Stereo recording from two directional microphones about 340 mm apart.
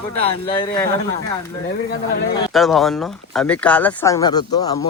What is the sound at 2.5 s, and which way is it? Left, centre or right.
Speech, centre.